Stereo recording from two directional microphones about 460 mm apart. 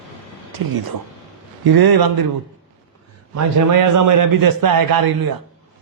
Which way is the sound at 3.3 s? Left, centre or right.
Right.